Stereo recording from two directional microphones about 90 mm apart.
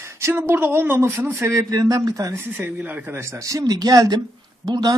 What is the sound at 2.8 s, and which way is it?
A man's voice, 20° right (ahead or behind).